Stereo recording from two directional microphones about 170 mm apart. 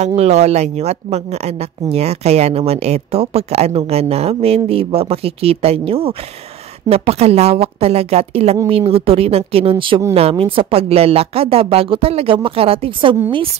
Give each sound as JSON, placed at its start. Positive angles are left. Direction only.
{"t": 0.0, "sound": "speech", "side_deg": -40}